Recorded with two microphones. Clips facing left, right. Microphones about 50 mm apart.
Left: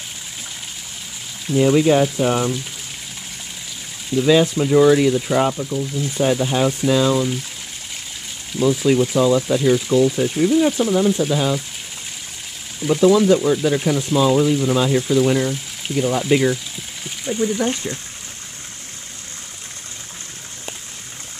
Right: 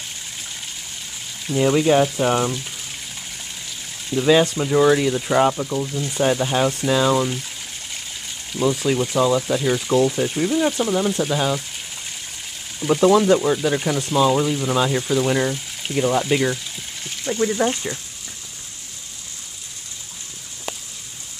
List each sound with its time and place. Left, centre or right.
1.5 s speech: centre
4.1 s speech: centre
5.6 s speech: right
5.9 s speech: centre
8.5 s speech: centre
12.8 s speech: centre